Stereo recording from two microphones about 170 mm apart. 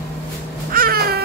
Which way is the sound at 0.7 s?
60° right (ahead or behind).